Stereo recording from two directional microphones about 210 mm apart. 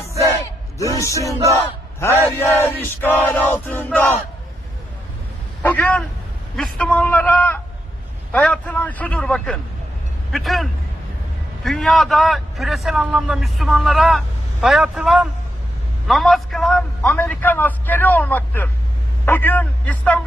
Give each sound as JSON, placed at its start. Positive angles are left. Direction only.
{"t": 0.8, "sound": "a man's voice", "side_deg": 15}
{"t": 1.5, "sound": "battle cry", "side_deg": 10}
{"t": 2.4, "sound": "a man's voice", "side_deg": 10}
{"t": 5.6, "sound": "a man's voice", "side_deg": 5}